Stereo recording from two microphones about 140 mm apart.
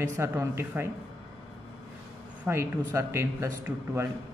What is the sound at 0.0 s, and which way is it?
Speech, 20° right (ahead or behind).